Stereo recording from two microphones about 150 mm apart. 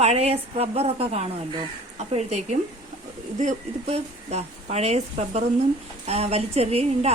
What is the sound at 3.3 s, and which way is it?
Speech, 50° right (ahead or behind).